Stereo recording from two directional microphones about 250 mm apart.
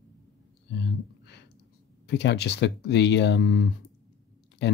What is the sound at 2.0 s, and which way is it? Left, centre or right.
Speech, left.